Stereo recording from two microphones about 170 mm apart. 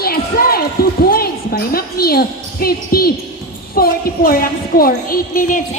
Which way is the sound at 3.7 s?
60° left (ahead or behind).